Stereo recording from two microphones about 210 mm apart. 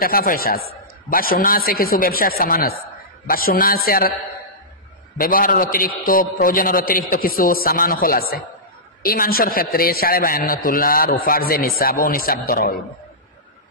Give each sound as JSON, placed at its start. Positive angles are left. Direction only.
{"t": 0.0, "sound": "a man's voice", "side_deg": 45}
{"t": 5.1, "sound": "a man's voice", "side_deg": 40}